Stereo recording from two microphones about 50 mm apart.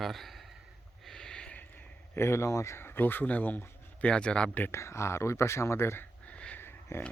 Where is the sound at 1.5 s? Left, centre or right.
Left.